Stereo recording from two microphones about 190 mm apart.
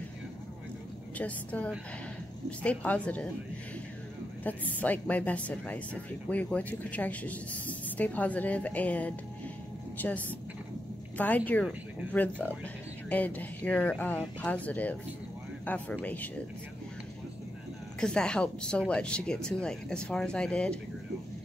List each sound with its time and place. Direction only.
1.1 s speech: 10° left (ahead or behind)
4.4 s speech: 10° left (ahead or behind)
11.1 s speech: 10° left (ahead or behind)
18.0 s speech: 5° left (ahead or behind)